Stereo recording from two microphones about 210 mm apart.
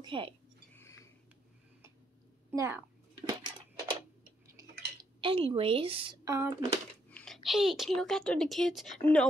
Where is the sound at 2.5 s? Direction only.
10° right (ahead or behind).